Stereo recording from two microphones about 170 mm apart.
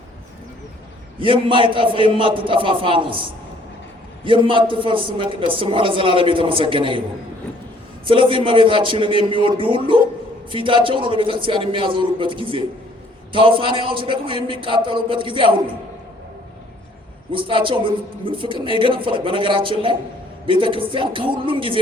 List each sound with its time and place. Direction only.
1.2 s a man's voice: 30° right (ahead or behind)
8.0 s speech: 30° right (ahead or behind)
17.3 s speech: 30° right (ahead or behind)